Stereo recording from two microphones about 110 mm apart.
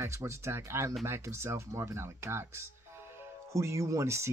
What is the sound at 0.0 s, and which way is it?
Speech, 25° right (ahead or behind).